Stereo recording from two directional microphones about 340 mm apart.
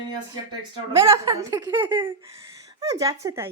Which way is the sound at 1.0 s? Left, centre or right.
Centre.